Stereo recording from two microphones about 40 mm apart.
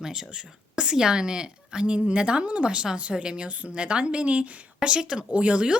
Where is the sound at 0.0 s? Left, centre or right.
Centre.